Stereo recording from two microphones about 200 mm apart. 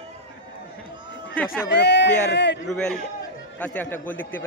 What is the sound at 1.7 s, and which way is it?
Speech, 60° left (ahead or behind).